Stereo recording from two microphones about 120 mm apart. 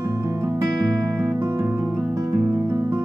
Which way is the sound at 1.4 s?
25° right (ahead or behind).